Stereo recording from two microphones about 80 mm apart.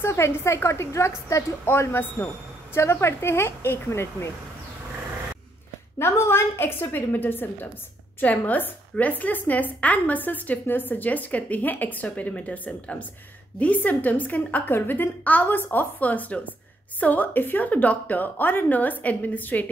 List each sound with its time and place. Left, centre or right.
0.0 s a woman's voice: left
5.9 s a woman's voice: left